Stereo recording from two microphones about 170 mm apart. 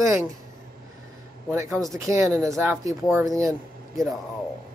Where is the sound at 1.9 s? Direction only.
20° right (ahead or behind).